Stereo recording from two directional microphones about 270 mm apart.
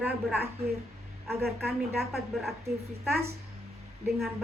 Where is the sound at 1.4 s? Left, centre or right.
Right.